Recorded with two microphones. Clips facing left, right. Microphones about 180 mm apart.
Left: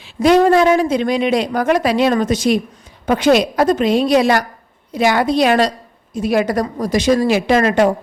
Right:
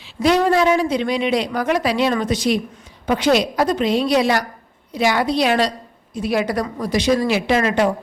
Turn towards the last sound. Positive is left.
turn(degrees=45)  # may be behind; listen again after turning